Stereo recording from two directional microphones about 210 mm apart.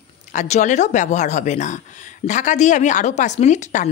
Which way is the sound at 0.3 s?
35° left (ahead or behind).